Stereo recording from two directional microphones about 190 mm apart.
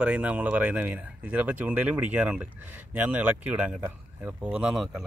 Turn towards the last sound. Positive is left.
turn(degrees=0)  # may be behind; listen again after turning